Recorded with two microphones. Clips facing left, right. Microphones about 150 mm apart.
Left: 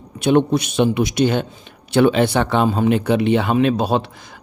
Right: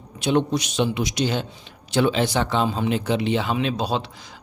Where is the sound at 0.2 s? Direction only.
55° left (ahead or behind).